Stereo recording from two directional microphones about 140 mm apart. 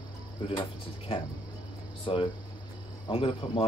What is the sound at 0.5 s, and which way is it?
Speech, 40° left (ahead or behind).